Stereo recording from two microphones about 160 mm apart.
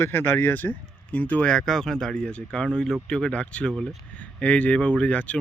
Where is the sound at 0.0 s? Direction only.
15° left (ahead or behind).